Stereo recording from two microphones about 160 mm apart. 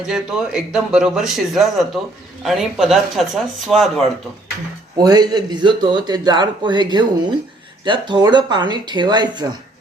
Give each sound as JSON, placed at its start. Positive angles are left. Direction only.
{"t": 0.0, "sound": "speech", "side_deg": -5}
{"t": 4.9, "sound": "a man's voice", "side_deg": -25}